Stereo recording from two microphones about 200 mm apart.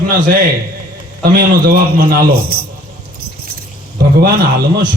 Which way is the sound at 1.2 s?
50° right (ahead or behind).